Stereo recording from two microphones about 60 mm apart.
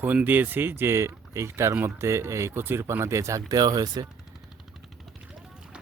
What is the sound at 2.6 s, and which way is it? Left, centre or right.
Speech, right.